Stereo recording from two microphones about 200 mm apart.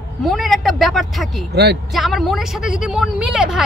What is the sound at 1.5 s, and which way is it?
Speech, 55° right (ahead or behind).